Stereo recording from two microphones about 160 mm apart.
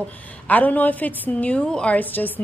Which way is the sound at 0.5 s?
10° left (ahead or behind).